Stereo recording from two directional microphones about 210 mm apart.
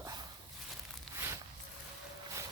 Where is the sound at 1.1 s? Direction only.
15° right (ahead or behind).